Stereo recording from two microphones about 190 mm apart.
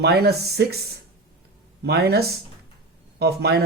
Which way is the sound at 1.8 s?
55° right (ahead or behind).